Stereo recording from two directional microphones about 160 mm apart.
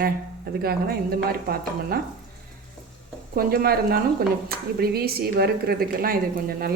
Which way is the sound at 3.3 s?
70° right (ahead or behind).